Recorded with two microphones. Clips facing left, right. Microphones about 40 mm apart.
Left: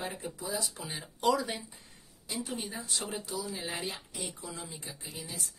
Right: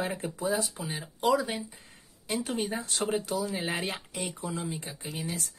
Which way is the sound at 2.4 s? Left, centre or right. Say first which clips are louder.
Right 6 dB; right.